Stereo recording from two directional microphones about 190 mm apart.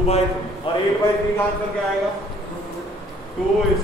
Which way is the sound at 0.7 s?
30° left (ahead or behind).